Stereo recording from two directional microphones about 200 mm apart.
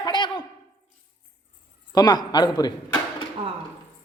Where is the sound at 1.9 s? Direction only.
20° left (ahead or behind).